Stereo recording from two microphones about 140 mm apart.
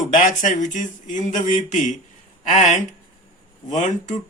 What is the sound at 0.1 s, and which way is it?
Speech, 70° left (ahead or behind).